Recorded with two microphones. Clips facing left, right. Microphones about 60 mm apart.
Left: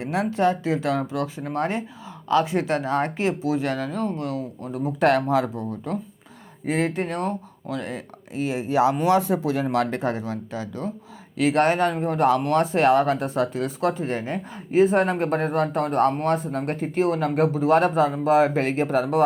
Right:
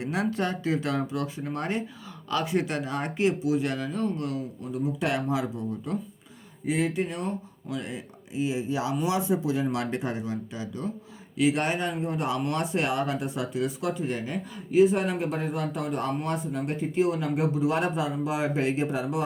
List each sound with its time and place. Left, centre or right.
0.0 s speech: left
4.6 s speech: left
9.6 s speech: left